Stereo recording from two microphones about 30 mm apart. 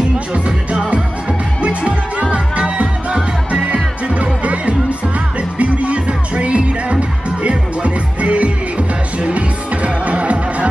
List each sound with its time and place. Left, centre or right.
1.6 s music: right
3.1 s music: right
3.6 s music: right